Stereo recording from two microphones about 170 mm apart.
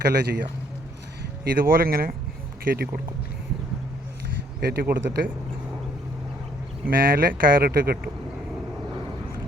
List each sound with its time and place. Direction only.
0.0 s speech: 75° right (ahead or behind)
1.2 s speech: 60° right (ahead or behind)
4.6 s speech: 65° right (ahead or behind)
6.8 s speech: 60° right (ahead or behind)